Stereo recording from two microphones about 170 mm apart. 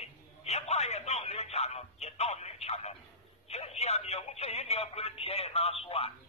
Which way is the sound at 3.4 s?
40° left (ahead or behind).